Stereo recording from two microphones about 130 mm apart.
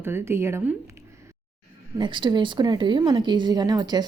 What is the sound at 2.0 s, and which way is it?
A woman's voice, 35° right (ahead or behind).